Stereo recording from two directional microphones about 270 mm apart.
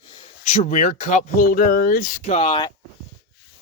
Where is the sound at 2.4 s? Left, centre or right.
Centre.